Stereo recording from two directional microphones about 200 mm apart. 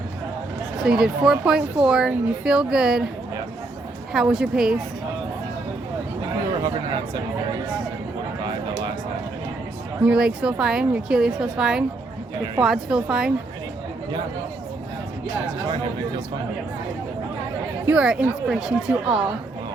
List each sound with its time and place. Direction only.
0.8 s a woman's voice: centre (ahead or behind)
4.1 s a woman's voice: 5° right (ahead or behind)
6.6 s speech: 20° right (ahead or behind)
10.0 s a woman's voice: 5° right (ahead or behind)
17.8 s a woman's voice: 5° right (ahead or behind)